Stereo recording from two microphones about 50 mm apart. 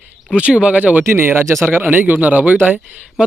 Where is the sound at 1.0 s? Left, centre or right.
Right.